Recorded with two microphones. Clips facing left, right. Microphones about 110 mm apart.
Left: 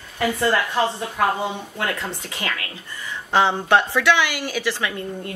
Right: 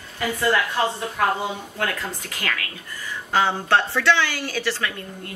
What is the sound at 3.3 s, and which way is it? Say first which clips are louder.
A woman's voice: left 2 dB; 20° left (ahead or behind).